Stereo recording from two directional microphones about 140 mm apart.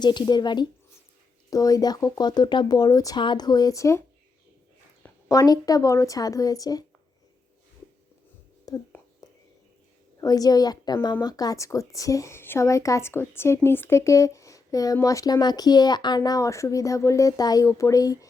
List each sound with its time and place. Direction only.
0.0 s a woman's voice: 30° left (ahead or behind)
5.3 s a woman's voice: 25° left (ahead or behind)
8.7 s speech: 25° left (ahead or behind)
9.2 s whispering: 25° left (ahead or behind)
10.2 s a woman's voice: 25° left (ahead or behind)